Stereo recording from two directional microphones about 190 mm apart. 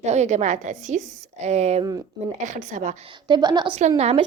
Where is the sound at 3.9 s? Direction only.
35° right (ahead or behind).